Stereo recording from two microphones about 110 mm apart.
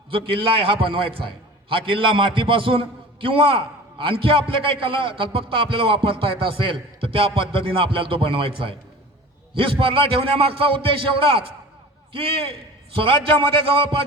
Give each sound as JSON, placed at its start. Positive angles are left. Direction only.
{"t": 0.1, "sound": "a man's voice", "side_deg": -55}